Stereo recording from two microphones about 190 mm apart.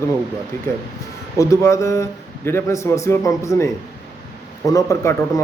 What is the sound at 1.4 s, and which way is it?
A man's voice, 15° left (ahead or behind).